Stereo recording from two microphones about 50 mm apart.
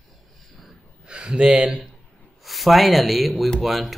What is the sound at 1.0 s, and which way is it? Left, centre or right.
Speech, centre.